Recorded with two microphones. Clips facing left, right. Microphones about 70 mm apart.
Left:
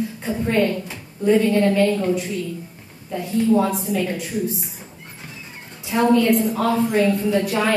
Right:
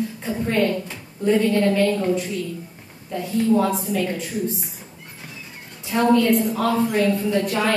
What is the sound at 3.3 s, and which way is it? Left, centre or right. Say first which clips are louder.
Speech: left 1 dB; centre.